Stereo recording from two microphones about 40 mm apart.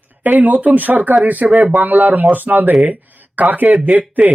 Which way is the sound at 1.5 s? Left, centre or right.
Centre.